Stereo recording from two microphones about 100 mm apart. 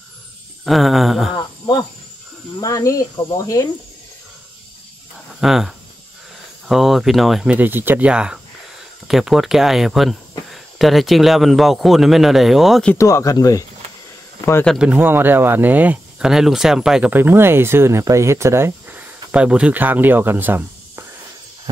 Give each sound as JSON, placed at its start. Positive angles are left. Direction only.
{"t": 0.7, "sound": "speech", "side_deg": 0}
{"t": 1.3, "sound": "cricket", "side_deg": 40}
{"t": 2.6, "sound": "speech", "side_deg": 35}
{"t": 5.4, "sound": "speech", "side_deg": -5}
{"t": 7.4, "sound": "speech", "side_deg": -15}
{"t": 12.9, "sound": "speech", "side_deg": 30}
{"t": 14.8, "sound": "speech", "side_deg": -15}
{"t": 16.3, "sound": "speech", "side_deg": -5}
{"t": 17.1, "sound": "speech", "side_deg": -20}